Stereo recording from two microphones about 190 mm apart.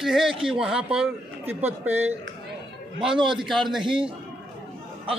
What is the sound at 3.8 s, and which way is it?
Speech, 25° right (ahead or behind).